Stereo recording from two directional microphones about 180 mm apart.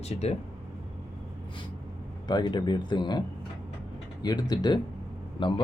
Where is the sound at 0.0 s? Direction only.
35° left (ahead or behind).